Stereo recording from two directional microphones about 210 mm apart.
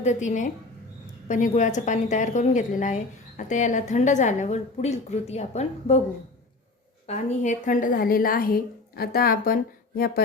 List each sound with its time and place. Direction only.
0.0 s a woman's voice: 35° left (ahead or behind)
7.1 s a woman's voice: 35° left (ahead or behind)